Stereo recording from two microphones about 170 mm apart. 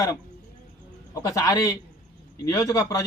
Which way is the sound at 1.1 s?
20° left (ahead or behind).